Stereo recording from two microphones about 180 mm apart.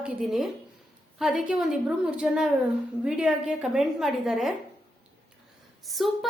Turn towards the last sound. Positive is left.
turn(degrees=0)  # may be behind; listen again after turning